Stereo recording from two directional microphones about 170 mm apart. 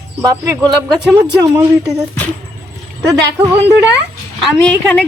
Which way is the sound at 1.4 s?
15° right (ahead or behind).